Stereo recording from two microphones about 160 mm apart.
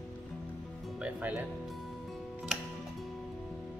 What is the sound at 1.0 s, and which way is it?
Speech, 10° right (ahead or behind).